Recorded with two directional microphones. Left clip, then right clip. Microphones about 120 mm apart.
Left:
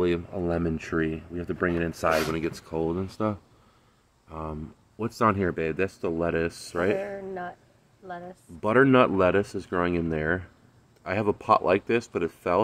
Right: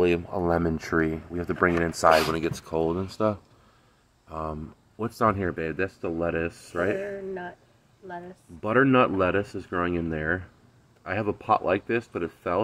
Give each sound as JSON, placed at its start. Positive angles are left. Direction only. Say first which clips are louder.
{"t": 0.0, "sound": "speech", "louder": "right 3 dB", "side_deg": 10}
{"t": 3.0, "sound": "speech", "louder": "right 3 dB", "side_deg": 30}
{"t": 5.6, "sound": "speech", "louder": "left 2 dB", "side_deg": 30}
{"t": 8.5, "sound": "speech", "louder": "left 1 dB", "side_deg": 35}